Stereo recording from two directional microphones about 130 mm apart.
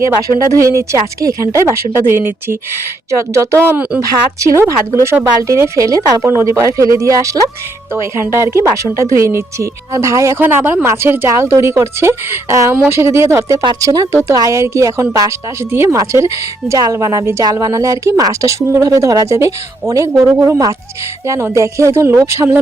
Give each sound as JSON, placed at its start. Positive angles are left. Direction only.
{"t": 0.3, "sound": "a woman's voice", "side_deg": -25}